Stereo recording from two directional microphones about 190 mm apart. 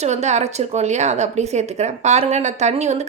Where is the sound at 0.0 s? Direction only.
35° right (ahead or behind).